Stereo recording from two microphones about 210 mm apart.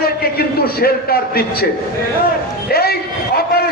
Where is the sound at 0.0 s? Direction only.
45° left (ahead or behind).